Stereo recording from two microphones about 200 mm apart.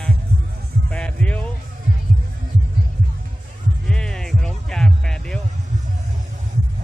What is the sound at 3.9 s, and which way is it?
Music, 5° left (ahead or behind).